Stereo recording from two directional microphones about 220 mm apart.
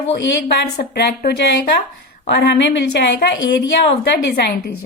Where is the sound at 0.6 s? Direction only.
45° left (ahead or behind).